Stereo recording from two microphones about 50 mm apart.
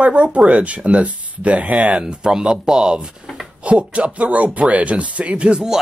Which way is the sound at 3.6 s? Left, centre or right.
Right.